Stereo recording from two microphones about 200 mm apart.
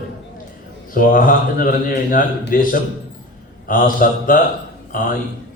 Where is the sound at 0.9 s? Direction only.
45° left (ahead or behind).